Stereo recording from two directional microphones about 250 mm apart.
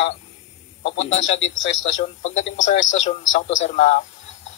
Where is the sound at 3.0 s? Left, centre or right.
Left.